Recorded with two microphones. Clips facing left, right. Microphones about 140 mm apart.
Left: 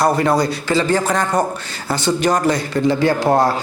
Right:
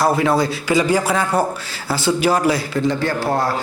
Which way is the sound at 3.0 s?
15° left (ahead or behind).